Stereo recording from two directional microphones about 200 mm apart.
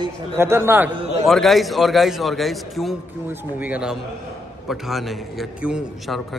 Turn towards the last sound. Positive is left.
turn(degrees=0)  # may be behind; listen again after turning